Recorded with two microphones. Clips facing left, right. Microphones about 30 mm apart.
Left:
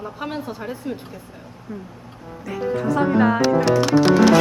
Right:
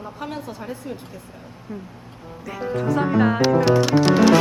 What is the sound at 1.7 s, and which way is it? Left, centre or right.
Speech, right.